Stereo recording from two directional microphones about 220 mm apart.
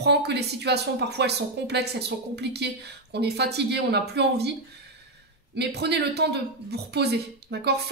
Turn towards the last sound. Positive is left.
turn(degrees=-50)  # may be behind; listen again after turning